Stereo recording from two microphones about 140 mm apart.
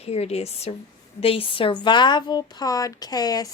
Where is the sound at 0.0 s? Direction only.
45° left (ahead or behind).